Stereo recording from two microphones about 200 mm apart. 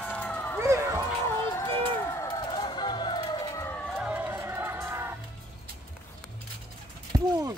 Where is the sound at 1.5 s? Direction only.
15° left (ahead or behind); by 5.1 s 10° right (ahead or behind).